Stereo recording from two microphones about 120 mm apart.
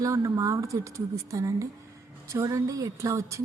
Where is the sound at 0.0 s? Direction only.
25° right (ahead or behind).